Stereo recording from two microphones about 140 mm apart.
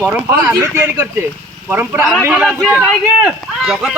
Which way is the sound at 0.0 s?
10° right (ahead or behind).